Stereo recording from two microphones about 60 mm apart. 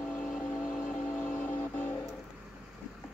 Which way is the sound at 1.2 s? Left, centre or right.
Left.